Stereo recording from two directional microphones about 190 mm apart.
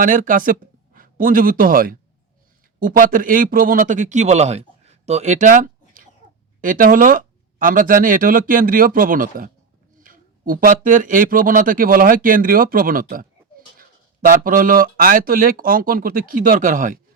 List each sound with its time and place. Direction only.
0.0 s a man's voice: 45° right (ahead or behind)